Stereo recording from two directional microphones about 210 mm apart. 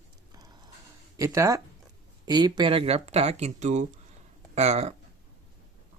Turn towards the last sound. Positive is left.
turn(degrees=-30)  # may be behind; listen again after turning